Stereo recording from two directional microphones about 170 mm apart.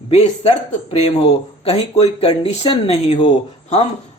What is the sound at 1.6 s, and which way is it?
Speech, 35° left (ahead or behind).